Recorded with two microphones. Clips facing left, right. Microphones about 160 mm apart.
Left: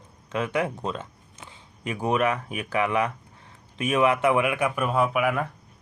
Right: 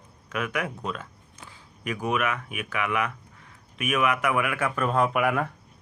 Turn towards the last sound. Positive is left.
turn(degrees=0)  # may be behind; listen again after turning